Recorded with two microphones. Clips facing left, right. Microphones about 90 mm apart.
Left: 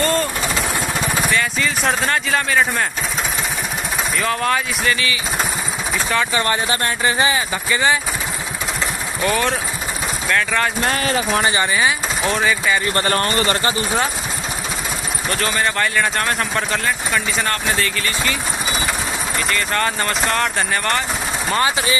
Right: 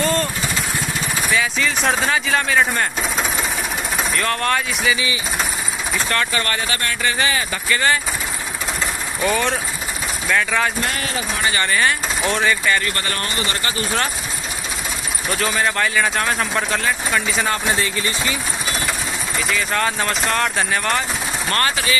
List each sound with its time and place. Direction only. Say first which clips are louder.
0.0 s vehicle: left 1 dB; centre (ahead or behind)
1.3 s speech: even; centre (ahead or behind)
4.2 s speech: left 2 dB; centre (ahead or behind)
5.9 s speech: left 2 dB; 5° left (ahead or behind)
6.3 s speech: left 3 dB; 20° left (ahead or behind)
9.2 s speech: left 1 dB; centre (ahead or behind)
10.8 s speech: left 4 dB; 40° left (ahead or behind)
11.6 s speech: even; 10° left (ahead or behind)
12.8 s speech: left 6 dB; 35° left (ahead or behind)
15.2 s speech: even; centre (ahead or behind)
17.7 s speech: even; 20° right (ahead or behind)
19.3 s speech: even; centre (ahead or behind)
21.5 s speech: left 2 dB; 10° left (ahead or behind)